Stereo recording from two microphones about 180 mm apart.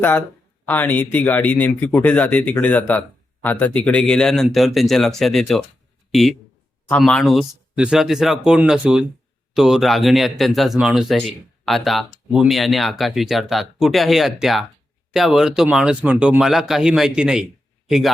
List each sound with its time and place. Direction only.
0.6 s speech: 10° left (ahead or behind)